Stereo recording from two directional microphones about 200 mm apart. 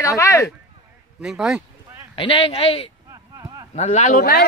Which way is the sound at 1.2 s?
5° right (ahead or behind).